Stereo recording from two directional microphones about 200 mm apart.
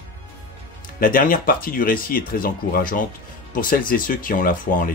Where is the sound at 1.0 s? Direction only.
45° left (ahead or behind).